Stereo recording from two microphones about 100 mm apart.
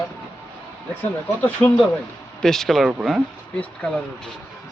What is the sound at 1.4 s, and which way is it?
Speech, 15° left (ahead or behind).